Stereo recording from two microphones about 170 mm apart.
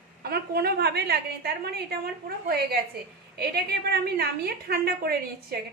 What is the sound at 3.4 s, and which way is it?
A woman's voice, 65° right (ahead or behind).